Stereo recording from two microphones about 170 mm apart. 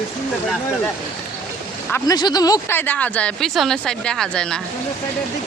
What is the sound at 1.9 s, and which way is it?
Speech, 20° left (ahead or behind).